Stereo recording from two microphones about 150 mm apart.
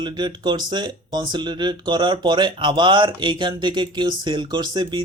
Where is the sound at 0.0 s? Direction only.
30° right (ahead or behind).